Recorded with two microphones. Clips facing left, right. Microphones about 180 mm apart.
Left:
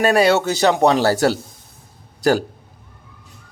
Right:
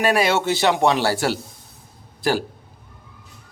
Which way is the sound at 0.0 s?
35° left (ahead or behind).